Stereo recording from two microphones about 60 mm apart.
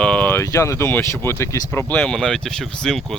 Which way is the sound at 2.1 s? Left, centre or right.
Centre.